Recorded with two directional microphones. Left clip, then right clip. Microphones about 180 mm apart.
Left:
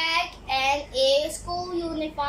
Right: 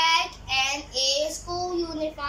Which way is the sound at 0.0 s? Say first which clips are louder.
Right 3 dB; 25° left (ahead or behind).